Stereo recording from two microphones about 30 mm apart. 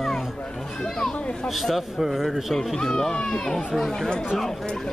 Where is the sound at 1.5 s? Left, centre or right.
Centre.